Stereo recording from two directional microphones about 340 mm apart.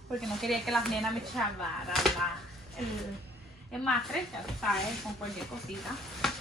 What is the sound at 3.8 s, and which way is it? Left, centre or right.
Speech, centre.